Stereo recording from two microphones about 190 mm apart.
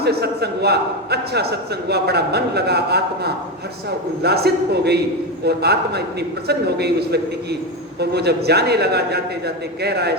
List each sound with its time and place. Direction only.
0.0 s a man's voice: 55° right (ahead or behind)